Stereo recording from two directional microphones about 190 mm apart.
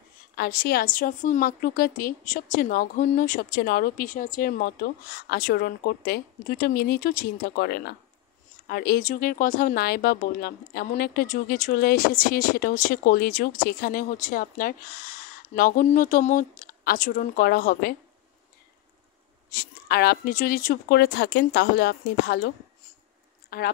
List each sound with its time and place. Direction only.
0.4 s speech: 55° left (ahead or behind)
19.5 s speech: 55° left (ahead or behind)
23.5 s speech: 55° left (ahead or behind)